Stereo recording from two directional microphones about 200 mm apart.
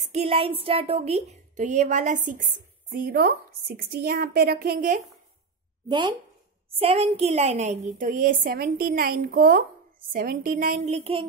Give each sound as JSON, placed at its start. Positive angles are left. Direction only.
{"t": 0.0, "sound": "a woman's voice", "side_deg": -30}
{"t": 5.9, "sound": "a woman's voice", "side_deg": -20}